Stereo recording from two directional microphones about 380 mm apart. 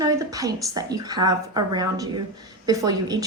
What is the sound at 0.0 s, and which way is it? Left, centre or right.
A woman's voice, centre.